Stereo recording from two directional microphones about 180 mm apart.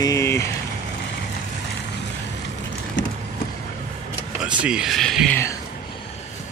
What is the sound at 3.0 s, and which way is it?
Vehicle, 90° left.